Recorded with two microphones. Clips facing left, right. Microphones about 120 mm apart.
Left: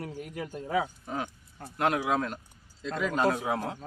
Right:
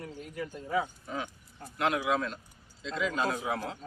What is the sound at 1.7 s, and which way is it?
Speech, 40° left (ahead or behind).